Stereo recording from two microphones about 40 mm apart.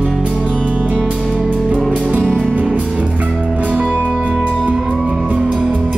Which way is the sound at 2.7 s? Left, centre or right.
Right.